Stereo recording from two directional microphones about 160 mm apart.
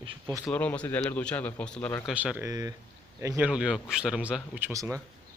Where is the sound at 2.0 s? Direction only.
5° right (ahead or behind).